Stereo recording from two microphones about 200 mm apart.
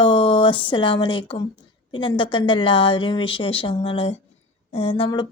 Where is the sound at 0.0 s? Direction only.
25° left (ahead or behind).